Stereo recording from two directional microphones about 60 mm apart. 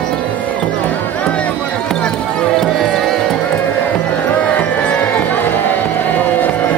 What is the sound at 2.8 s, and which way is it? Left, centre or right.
Music, centre.